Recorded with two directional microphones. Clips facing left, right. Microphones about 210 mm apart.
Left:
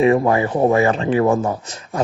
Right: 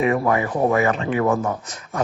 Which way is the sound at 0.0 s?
30° left (ahead or behind).